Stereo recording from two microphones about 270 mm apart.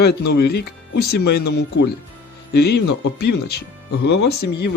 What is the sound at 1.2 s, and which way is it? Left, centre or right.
Speech, left.